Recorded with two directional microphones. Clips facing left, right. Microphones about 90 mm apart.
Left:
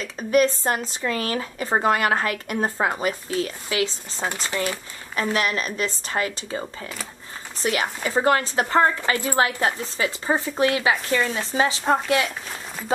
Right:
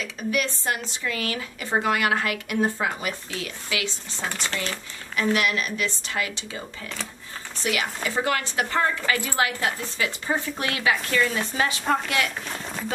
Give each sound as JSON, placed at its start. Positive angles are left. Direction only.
{"t": 0.0, "sound": "speech", "side_deg": 40}
{"t": 5.3, "sound": "speech", "side_deg": 35}
{"t": 7.6, "sound": "speech", "side_deg": 40}